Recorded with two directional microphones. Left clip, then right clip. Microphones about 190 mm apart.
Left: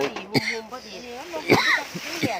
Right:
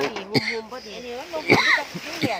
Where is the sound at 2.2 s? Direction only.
5° left (ahead or behind).